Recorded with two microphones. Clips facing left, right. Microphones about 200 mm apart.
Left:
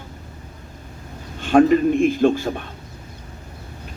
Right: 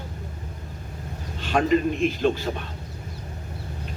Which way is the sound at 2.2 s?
50° left (ahead or behind).